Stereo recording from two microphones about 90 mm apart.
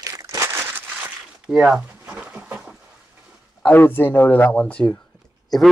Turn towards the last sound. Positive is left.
turn(degrees=0)  # may be behind; listen again after turning